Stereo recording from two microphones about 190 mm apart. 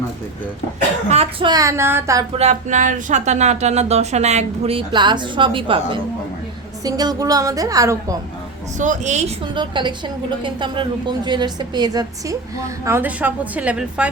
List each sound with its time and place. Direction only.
1.1 s a woman's voice: 30° right (ahead or behind); by 2.2 s 15° right (ahead or behind)
2.4 s a woman's voice: 40° right (ahead or behind); by 8.2 s 20° right (ahead or behind)
8.8 s speech: 40° right (ahead or behind)
9.6 s a woman's voice: 25° right (ahead or behind); by 14.1 s 5° right (ahead or behind)